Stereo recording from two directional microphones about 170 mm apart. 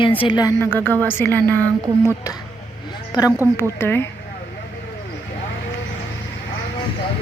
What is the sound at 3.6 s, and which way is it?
Speech, 15° left (ahead or behind).